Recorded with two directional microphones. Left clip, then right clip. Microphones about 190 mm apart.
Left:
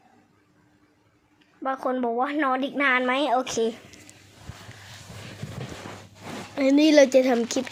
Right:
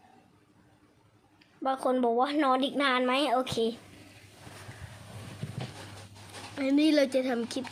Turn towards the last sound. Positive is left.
turn(degrees=5)  # may be behind; listen again after turning